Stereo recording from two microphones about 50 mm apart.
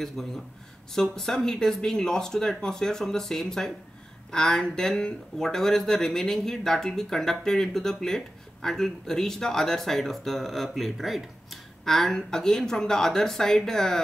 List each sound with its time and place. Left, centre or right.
0.2 s speech: centre